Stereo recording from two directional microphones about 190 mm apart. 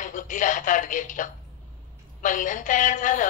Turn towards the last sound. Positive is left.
turn(degrees=40)  # may be behind; listen again after turning